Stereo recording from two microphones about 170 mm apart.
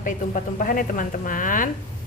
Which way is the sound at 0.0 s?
50° left (ahead or behind).